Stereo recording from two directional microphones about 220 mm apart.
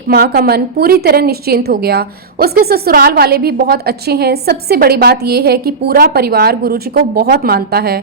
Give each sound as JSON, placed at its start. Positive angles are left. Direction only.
{"t": 0.1, "sound": "a woman's voice", "side_deg": -45}